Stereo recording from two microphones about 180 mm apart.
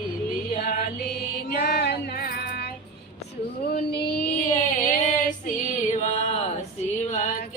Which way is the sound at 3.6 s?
60° left (ahead or behind).